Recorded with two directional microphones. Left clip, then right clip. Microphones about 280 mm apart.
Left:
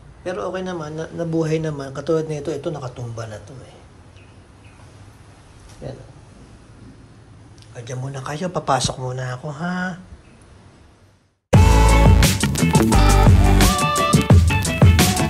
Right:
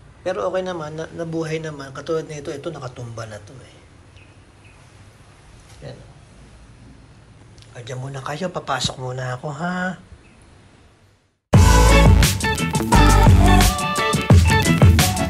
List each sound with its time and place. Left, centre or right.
0.2 s a man's voice: centre
5.8 s a sound: centre
7.7 s a man's voice: centre
11.5 s music: centre